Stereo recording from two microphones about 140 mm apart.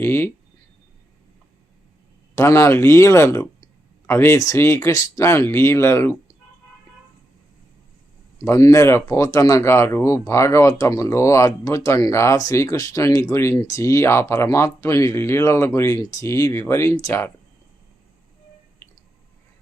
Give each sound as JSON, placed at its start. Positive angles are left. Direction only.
{"t": 0.0, "sound": "speech", "side_deg": 15}
{"t": 2.3, "sound": "speech", "side_deg": 20}
{"t": 8.4, "sound": "speech", "side_deg": 20}